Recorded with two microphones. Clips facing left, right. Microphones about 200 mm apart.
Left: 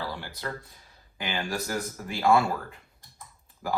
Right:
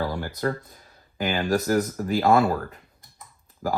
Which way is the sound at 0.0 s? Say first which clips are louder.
Right 9 dB; 45° right (ahead or behind).